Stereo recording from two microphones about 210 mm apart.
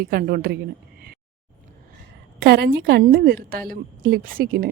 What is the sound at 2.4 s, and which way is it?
Speech, 50° right (ahead or behind).